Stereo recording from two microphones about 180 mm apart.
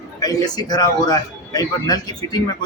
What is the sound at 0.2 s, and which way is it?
A man's voice, 20° left (ahead or behind).